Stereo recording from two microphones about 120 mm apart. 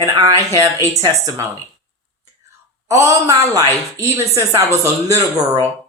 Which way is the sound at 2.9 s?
25° right (ahead or behind).